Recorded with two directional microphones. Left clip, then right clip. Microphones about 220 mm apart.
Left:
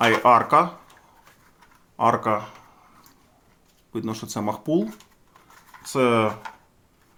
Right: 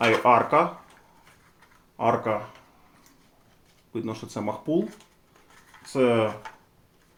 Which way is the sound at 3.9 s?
40° left (ahead or behind).